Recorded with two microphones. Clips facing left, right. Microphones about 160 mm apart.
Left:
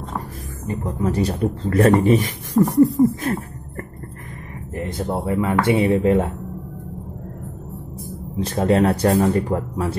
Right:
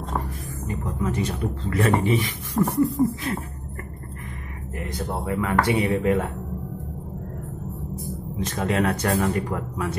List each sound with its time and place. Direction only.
0.8 s speech: 35° left (ahead or behind)
4.7 s speech: 25° left (ahead or behind)
8.4 s speech: 30° left (ahead or behind)